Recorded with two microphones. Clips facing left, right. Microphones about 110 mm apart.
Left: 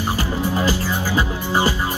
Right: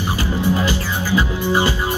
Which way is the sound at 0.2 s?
35° left (ahead or behind).